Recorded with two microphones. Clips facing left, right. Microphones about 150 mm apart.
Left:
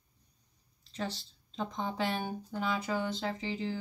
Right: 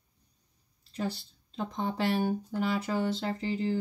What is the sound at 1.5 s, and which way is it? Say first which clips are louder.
Speech: right 3 dB; 5° right (ahead or behind).